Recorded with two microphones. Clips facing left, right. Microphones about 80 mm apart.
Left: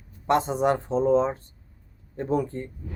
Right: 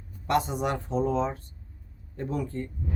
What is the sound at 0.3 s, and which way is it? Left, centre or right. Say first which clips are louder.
Speech: left 4 dB; left.